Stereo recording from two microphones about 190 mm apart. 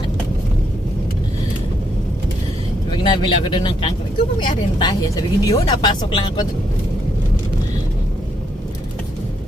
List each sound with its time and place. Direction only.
2.9 s speech: 25° left (ahead or behind)